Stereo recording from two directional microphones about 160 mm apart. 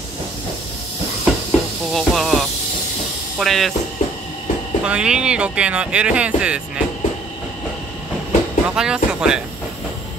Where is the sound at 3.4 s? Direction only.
Centre (ahead or behind).